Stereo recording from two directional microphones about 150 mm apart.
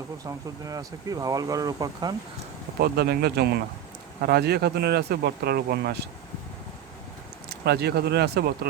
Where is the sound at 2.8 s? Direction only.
90° right.